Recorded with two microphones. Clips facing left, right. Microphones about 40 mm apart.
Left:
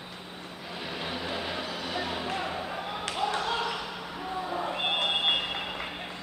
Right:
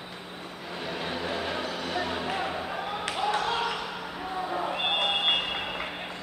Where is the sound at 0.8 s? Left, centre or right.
Centre.